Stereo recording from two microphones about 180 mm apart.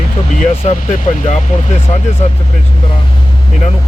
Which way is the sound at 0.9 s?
40° left (ahead or behind).